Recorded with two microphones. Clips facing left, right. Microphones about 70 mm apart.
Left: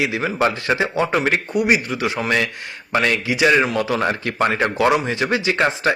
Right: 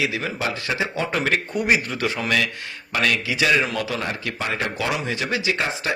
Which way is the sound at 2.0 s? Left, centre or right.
Left.